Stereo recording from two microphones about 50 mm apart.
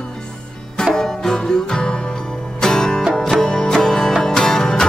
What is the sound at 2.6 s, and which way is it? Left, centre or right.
Music, centre.